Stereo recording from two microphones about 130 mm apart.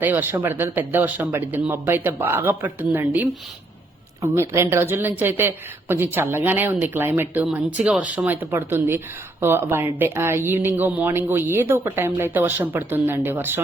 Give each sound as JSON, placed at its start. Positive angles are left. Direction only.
{"t": 0.0, "sound": "speech", "side_deg": -15}